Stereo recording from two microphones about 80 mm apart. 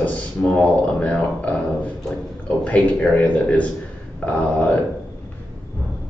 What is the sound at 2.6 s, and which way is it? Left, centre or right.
Speech, centre.